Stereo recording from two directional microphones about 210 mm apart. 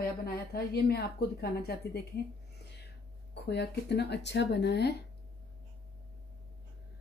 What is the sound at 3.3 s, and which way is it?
A woman's voice, 55° left (ahead or behind).